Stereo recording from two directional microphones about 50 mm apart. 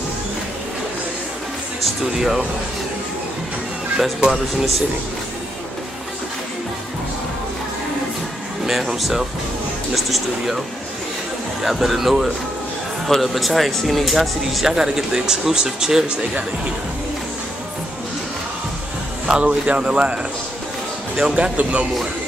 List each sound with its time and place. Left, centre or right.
2.1 s speech: centre
4.2 s speech: centre
8.6 s speech: centre
11.6 s speech: centre
19.2 s speech: centre
21.4 s speech: right